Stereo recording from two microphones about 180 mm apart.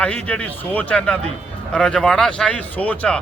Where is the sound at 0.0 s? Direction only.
5° left (ahead or behind).